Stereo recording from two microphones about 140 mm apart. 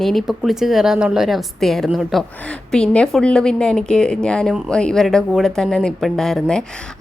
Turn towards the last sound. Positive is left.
turn(degrees=5)  # may be behind; listen again after turning